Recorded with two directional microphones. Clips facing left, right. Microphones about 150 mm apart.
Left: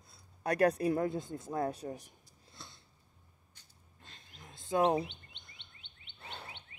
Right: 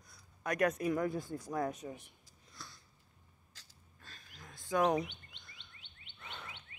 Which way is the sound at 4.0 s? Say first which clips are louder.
Even; 25° left (ahead or behind).